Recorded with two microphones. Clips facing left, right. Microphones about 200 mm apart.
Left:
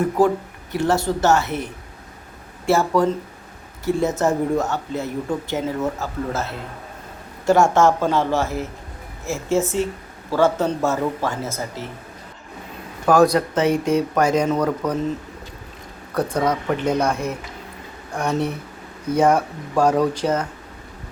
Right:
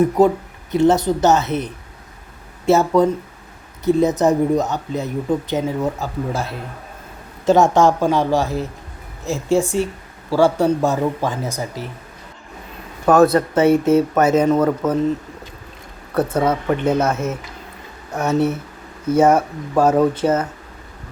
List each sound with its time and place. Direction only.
0.2 s speech: 20° right (ahead or behind)
13.1 s speech: 5° right (ahead or behind)
16.1 s speech: 5° right (ahead or behind)